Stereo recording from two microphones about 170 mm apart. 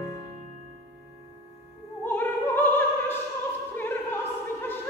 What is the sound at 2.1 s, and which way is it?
Opera, 10° left (ahead or behind).